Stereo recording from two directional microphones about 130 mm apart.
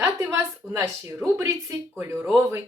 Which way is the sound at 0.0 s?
20° right (ahead or behind).